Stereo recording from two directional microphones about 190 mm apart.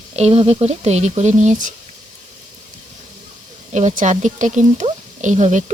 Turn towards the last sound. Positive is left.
turn(degrees=-40)  # may be behind; listen again after turning